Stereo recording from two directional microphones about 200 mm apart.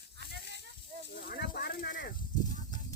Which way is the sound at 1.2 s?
50° left (ahead or behind).